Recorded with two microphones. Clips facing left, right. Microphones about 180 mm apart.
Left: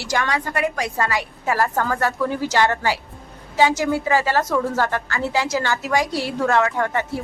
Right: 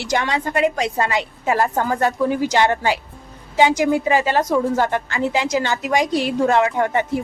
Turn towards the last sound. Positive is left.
turn(degrees=-20)  # may be behind; listen again after turning